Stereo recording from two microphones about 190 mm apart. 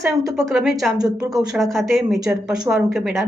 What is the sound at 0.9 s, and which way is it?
Speech, 20° right (ahead or behind).